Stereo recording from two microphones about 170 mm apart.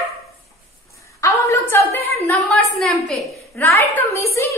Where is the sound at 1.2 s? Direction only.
20° left (ahead or behind).